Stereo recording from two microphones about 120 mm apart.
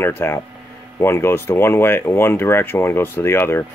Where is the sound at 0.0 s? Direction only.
20° left (ahead or behind).